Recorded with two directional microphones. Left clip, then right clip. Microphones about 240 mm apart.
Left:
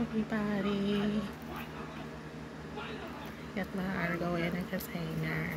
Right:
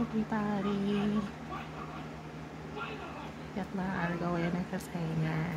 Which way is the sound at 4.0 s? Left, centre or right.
Centre.